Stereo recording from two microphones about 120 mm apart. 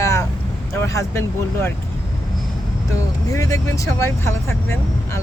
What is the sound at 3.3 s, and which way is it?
Speech, 25° left (ahead or behind).